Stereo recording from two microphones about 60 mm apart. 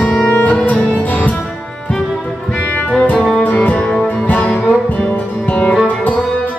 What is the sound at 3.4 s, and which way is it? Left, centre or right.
Music, left.